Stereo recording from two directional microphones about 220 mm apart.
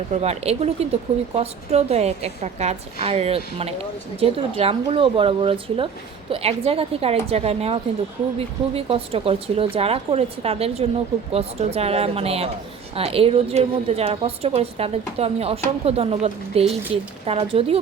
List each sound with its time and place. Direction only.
0.1 s a woman's voice: 30° right (ahead or behind)